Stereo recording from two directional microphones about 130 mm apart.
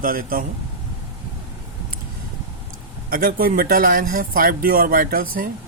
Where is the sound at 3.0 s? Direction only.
90° right.